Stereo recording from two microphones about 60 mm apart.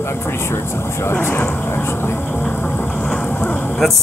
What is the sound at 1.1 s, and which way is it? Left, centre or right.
Speech, left.